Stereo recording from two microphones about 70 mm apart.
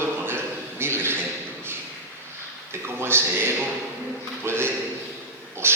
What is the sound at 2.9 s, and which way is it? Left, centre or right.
A man's voice, right.